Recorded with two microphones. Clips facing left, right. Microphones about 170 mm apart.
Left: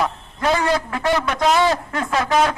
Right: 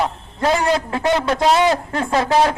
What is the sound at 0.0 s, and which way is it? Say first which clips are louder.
A man's voice: right 2 dB; 25° right (ahead or behind).